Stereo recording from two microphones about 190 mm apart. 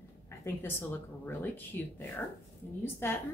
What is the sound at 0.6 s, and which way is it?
Speech, 10° left (ahead or behind).